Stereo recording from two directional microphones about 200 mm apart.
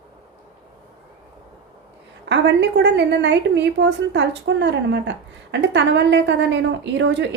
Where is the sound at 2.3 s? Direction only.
60° right (ahead or behind).